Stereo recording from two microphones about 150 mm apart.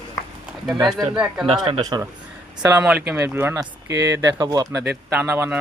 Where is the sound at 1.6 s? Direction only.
30° right (ahead or behind).